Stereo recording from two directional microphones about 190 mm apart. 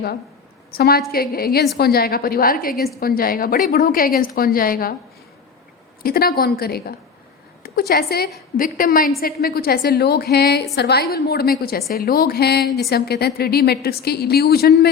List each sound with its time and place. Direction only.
0.7 s a woman's voice: 55° left (ahead or behind)
6.0 s a woman's voice: 50° left (ahead or behind)